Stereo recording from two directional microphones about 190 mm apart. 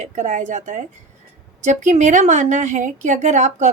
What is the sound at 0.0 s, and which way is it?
A woman's voice, 40° right (ahead or behind).